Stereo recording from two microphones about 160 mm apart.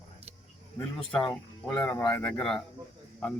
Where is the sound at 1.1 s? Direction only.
5° left (ahead or behind).